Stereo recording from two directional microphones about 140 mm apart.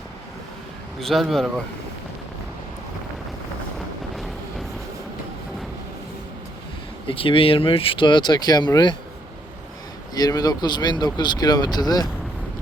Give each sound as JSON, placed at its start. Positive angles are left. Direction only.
{"t": 0.9, "sound": "speech", "side_deg": 0}
{"t": 7.1, "sound": "speech", "side_deg": 40}
{"t": 10.2, "sound": "speech", "side_deg": 30}